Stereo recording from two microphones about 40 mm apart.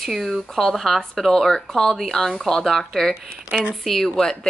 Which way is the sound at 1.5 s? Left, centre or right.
Centre.